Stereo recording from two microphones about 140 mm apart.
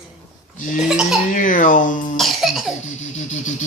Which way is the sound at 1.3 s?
70° left (ahead or behind).